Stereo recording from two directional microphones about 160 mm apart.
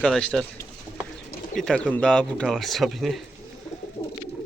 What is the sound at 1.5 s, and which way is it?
Speech, 5° left (ahead or behind).